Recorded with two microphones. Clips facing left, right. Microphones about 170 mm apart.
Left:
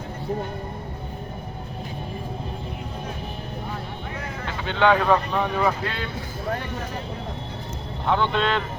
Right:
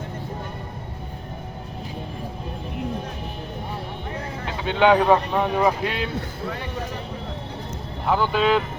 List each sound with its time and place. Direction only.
4.4 s speech: 15° right (ahead or behind)
8.0 s speech: 5° right (ahead or behind)